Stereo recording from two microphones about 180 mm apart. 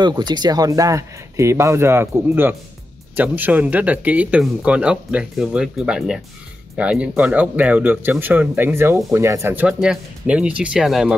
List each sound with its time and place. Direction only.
0.0 s speech: 25° right (ahead or behind); by 11.1 s centre (ahead or behind)